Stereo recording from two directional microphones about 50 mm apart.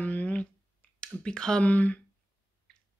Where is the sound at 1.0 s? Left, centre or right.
Centre.